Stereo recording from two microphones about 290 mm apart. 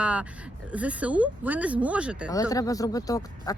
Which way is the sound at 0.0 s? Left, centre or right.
Centre.